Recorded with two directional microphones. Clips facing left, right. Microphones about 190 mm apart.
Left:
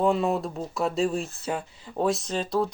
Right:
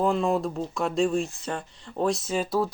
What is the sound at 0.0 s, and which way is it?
Speech, centre (ahead or behind).